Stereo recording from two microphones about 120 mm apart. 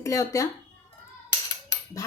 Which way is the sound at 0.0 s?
25° left (ahead or behind).